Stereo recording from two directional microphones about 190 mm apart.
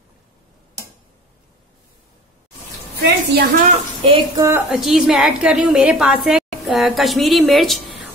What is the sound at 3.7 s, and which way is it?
Speech, 30° right (ahead or behind).